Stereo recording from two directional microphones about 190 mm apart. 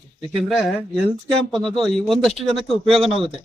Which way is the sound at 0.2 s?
Centre (ahead or behind).